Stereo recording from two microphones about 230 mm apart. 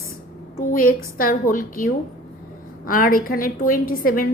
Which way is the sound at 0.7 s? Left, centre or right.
Left.